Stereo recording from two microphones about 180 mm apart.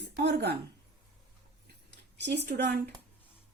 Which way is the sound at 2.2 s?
70° right (ahead or behind).